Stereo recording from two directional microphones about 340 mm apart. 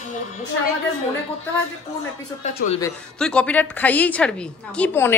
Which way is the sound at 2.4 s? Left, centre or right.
Centre.